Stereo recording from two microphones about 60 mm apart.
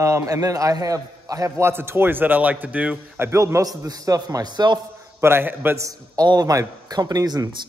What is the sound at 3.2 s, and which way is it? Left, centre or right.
Speech, right.